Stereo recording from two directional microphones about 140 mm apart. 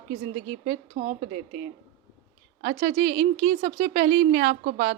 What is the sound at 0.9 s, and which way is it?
Speech, 60° right (ahead or behind).